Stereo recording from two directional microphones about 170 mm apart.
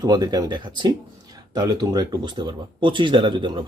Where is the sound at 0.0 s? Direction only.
25° right (ahead or behind).